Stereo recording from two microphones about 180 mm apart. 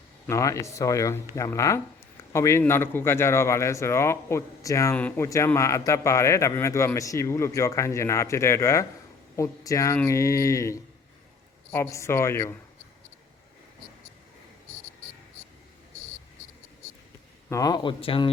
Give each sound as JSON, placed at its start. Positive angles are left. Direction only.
{"t": 0.3, "sound": "speech", "side_deg": 15}
{"t": 17.5, "sound": "speech", "side_deg": 20}